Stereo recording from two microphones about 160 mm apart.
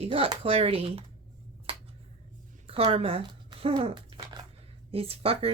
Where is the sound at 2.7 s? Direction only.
35° right (ahead or behind).